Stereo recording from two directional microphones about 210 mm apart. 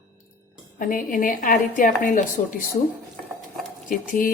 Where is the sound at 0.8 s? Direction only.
40° left (ahead or behind).